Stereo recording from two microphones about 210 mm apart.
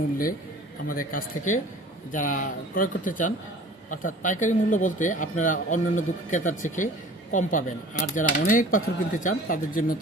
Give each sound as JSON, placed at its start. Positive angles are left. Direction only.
{"t": 0.9, "sound": "speech", "side_deg": 40}